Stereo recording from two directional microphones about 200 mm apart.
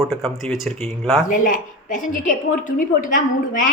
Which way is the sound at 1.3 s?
40° left (ahead or behind).